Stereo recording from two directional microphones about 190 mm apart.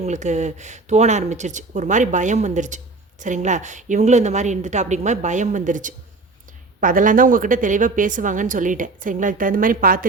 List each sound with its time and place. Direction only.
0.0 s a woman's voice: 40° right (ahead or behind)